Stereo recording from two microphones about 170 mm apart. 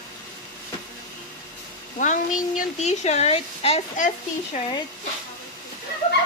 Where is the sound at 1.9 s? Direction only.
50° left (ahead or behind).